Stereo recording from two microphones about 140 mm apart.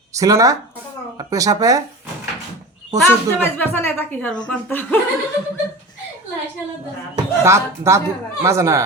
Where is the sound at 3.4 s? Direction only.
15° left (ahead or behind).